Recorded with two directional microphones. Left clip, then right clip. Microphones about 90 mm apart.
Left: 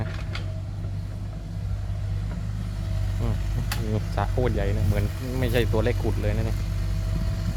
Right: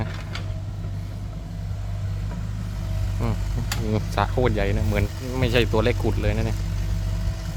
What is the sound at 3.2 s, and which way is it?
Speech, 50° right (ahead or behind).